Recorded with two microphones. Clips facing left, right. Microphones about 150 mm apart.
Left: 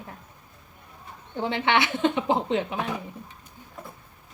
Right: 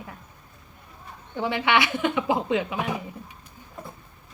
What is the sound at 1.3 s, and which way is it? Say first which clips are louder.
Speech: right 1 dB; 20° left (ahead or behind).